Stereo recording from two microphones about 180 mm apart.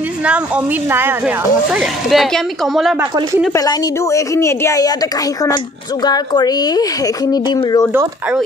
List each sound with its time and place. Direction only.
0.8 s speech: 10° right (ahead or behind)
3.5 s a woman's voice: 20° left (ahead or behind)
6.0 s speech: 20° left (ahead or behind)
7.9 s speech: 10° right (ahead or behind)